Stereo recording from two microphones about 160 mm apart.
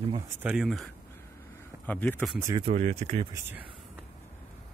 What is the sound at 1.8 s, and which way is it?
Speech, 10° left (ahead or behind).